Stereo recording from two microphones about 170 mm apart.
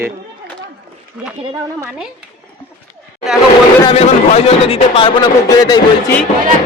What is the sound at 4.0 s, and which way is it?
A man's voice, 35° left (ahead or behind).